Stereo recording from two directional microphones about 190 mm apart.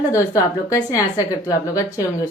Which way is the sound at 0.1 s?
20° left (ahead or behind).